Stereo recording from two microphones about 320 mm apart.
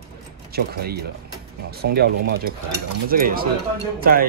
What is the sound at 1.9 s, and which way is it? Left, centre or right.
A man's voice, right.